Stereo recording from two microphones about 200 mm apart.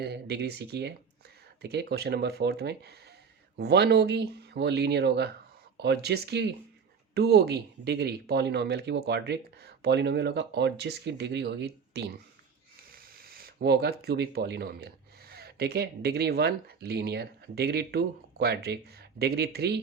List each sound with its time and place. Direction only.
0.0 s speech: 55° right (ahead or behind)
13.1 s speech: 50° right (ahead or behind)